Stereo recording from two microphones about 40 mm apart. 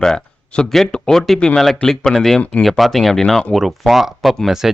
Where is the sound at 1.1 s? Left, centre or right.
Centre.